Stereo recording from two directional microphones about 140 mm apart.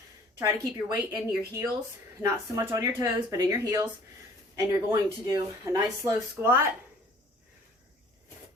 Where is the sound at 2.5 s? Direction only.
25° right (ahead or behind).